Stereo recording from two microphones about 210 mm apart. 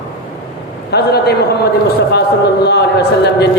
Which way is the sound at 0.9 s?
50° left (ahead or behind).